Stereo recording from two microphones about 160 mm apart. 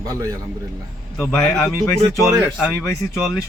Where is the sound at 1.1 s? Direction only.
5° left (ahead or behind).